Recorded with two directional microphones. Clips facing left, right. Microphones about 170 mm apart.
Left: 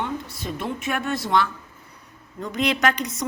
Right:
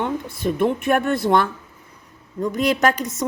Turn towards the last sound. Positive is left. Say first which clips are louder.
# right 3 dB
turn(degrees=-45)  # may be behind; listen again after turning